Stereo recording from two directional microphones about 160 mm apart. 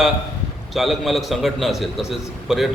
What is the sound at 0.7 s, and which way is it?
A man's voice, centre (ahead or behind).